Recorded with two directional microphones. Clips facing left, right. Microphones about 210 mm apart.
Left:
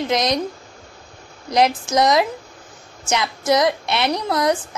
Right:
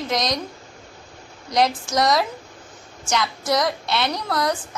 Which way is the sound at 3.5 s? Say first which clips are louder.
Left 5 dB; 20° left (ahead or behind).